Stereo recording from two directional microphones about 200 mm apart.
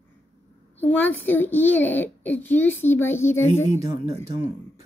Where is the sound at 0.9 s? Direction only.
10° left (ahead or behind).